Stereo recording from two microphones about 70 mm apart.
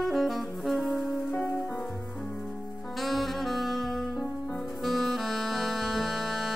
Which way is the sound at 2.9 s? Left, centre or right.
Centre.